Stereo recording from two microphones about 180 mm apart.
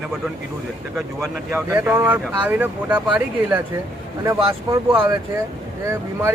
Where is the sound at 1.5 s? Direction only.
10° right (ahead or behind).